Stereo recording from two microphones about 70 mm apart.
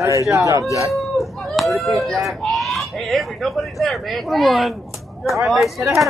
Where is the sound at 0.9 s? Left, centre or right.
Centre.